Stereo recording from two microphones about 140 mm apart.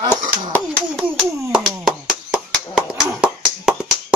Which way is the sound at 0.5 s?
Centre (ahead or behind).